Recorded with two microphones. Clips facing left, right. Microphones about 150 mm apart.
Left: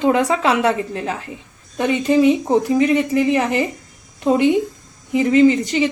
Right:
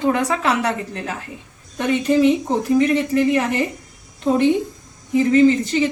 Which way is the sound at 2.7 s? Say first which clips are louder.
Right 3 dB; 20° left (ahead or behind).